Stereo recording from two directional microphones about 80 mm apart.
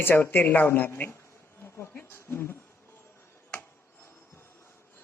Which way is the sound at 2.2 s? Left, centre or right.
Left.